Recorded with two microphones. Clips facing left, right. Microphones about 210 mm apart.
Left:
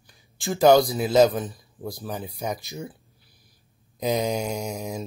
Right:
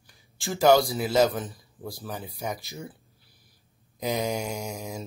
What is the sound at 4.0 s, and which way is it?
Speech, 20° left (ahead or behind).